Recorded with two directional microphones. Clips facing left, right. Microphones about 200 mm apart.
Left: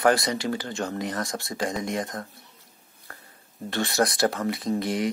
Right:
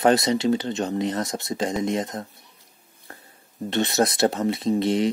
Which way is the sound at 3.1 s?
25° right (ahead or behind).